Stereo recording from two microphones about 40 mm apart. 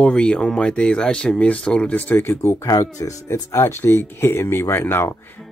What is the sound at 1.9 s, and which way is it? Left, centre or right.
Speech, left.